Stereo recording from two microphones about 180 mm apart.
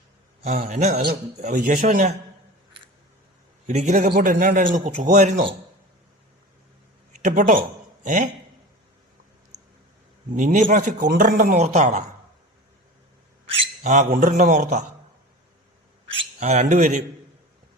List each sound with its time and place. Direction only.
0.4 s a man's voice: 45° right (ahead or behind)
3.7 s a man's voice: 40° right (ahead or behind)
7.3 s a man's voice: 45° right (ahead or behind)
10.3 s a man's voice: 45° right (ahead or behind)
13.8 s a man's voice: 45° right (ahead or behind)
16.4 s a man's voice: 40° right (ahead or behind)